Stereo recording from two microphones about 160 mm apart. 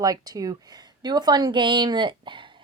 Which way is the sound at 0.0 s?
20° right (ahead or behind).